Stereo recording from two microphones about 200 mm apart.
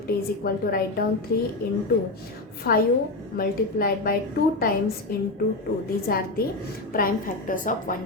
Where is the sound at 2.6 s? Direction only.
50° left (ahead or behind).